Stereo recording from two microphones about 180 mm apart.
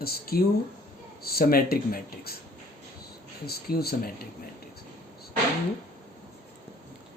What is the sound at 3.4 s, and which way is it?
Speech, 60° left (ahead or behind).